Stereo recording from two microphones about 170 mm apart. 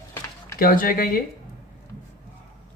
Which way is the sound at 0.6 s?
55° left (ahead or behind).